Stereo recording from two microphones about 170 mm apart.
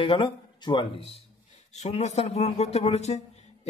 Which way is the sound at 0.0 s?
30° left (ahead or behind).